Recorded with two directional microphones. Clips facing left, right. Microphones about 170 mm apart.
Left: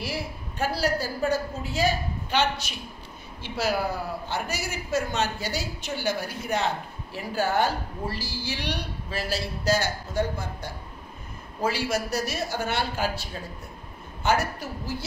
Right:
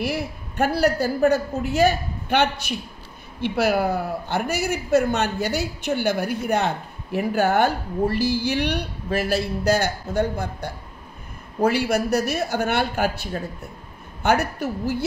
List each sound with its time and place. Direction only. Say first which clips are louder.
0.0 s speech: right 6 dB; 60° right (ahead or behind)